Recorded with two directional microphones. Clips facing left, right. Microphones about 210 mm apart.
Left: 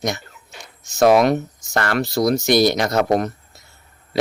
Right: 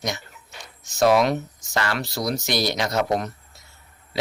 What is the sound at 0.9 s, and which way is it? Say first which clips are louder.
Speech: left 4 dB; 55° left (ahead or behind).